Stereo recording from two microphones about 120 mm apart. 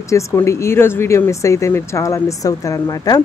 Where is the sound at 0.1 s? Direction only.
25° left (ahead or behind).